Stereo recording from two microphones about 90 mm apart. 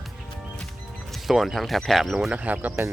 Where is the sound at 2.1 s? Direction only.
15° right (ahead or behind).